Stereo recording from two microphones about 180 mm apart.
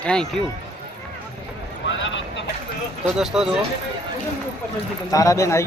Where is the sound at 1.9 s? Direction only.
90° left.